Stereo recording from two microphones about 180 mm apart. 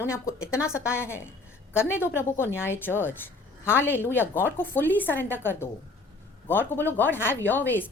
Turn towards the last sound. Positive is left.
turn(degrees=10)  # may be behind; listen again after turning